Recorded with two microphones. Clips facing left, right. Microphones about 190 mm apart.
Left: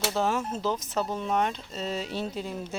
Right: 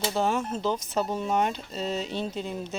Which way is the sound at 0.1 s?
Centre (ahead or behind).